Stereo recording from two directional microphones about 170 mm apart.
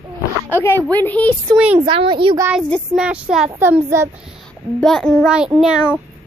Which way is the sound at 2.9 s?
5° right (ahead or behind).